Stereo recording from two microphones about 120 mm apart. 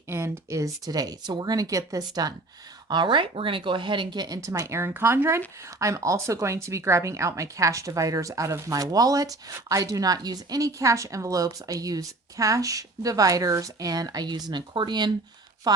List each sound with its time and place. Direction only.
0.1 s speech: 25° right (ahead or behind)